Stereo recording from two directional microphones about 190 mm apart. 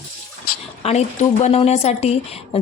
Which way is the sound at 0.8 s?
35° left (ahead or behind).